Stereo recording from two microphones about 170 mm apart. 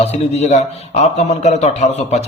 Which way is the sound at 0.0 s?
40° left (ahead or behind).